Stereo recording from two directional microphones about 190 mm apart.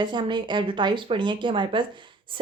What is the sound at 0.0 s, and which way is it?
Speech, 25° right (ahead or behind).